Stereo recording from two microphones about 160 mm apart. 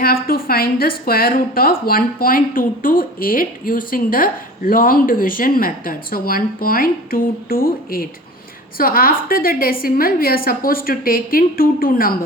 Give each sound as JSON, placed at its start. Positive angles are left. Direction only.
{"t": 0.0, "sound": "a woman's voice", "side_deg": 70}